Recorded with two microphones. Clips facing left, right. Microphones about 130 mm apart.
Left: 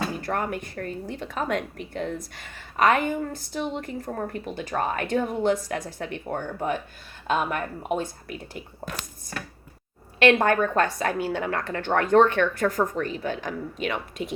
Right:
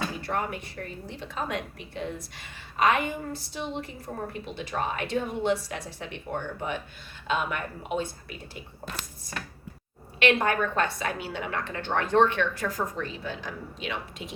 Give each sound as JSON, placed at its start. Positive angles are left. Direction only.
{"t": 0.2, "sound": "speech", "side_deg": 50}
{"t": 10.2, "sound": "speech", "side_deg": 45}